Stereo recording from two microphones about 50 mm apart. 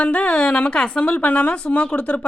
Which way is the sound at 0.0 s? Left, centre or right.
Left.